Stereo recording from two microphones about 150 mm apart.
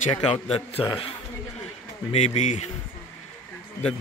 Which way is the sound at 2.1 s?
50° left (ahead or behind).